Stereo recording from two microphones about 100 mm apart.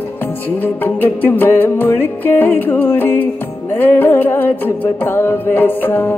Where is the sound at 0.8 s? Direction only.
20° left (ahead or behind).